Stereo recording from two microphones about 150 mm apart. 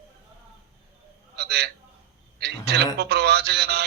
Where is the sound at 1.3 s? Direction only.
90° right.